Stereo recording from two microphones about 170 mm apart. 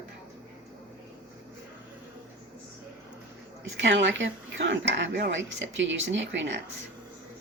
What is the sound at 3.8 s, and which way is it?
Speech, 90° right.